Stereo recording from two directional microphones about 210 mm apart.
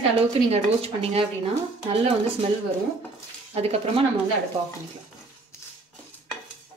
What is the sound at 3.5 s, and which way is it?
Speech, 30° right (ahead or behind).